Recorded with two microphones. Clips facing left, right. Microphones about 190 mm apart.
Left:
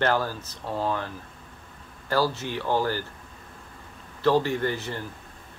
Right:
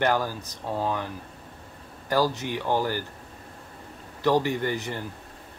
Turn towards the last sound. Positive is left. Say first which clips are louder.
# even
turn(degrees=-15)  # may be behind; listen again after turning